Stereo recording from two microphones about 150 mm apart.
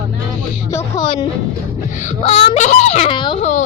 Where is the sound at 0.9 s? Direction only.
35° left (ahead or behind).